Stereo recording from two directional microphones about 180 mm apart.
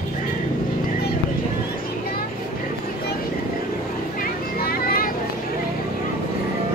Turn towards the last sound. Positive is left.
turn(degrees=55)  # may be behind; listen again after turning